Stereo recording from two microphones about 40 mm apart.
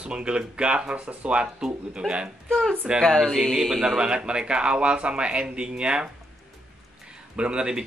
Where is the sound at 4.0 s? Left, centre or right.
Right.